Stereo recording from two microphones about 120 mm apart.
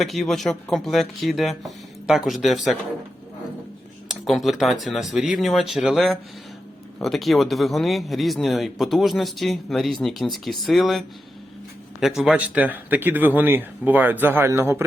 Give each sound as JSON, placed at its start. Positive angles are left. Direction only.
{"t": 0.0, "sound": "a man's voice", "side_deg": 0}
{"t": 4.1, "sound": "a man's voice", "side_deg": 0}